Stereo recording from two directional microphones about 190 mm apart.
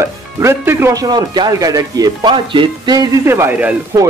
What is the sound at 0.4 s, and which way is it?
A man's voice, 15° right (ahead or behind).